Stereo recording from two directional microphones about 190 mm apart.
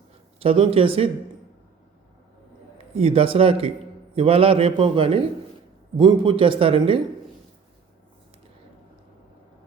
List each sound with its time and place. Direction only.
0.3 s a man's voice: 30° right (ahead or behind)
2.7 s a man's voice: 30° right (ahead or behind)